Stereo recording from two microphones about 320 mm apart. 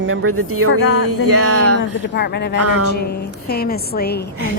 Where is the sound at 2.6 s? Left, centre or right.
Right.